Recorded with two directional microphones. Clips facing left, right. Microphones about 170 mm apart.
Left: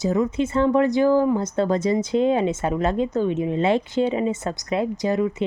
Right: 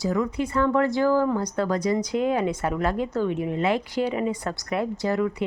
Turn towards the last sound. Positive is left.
turn(degrees=20)  # may be behind; listen again after turning